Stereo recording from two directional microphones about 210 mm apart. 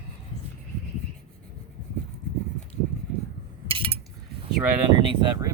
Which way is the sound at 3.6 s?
25° right (ahead or behind).